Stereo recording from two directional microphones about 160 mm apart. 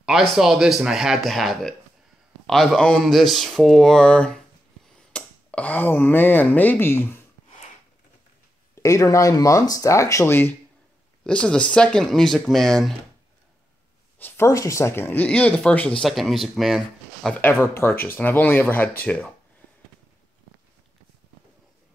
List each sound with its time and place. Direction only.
0.0 s speech: 5° right (ahead or behind); by 7.2 s 15° left (ahead or behind)
8.7 s speech: 20° left (ahead or behind); by 12.9 s centre (ahead or behind)
14.1 s speech: 15° left (ahead or behind)